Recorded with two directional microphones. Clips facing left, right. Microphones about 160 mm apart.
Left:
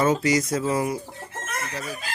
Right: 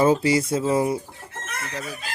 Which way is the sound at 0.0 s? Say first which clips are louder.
Right 2 dB; 30° right (ahead or behind).